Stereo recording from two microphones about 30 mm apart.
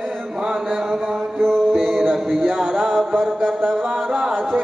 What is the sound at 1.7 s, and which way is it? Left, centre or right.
Music, centre.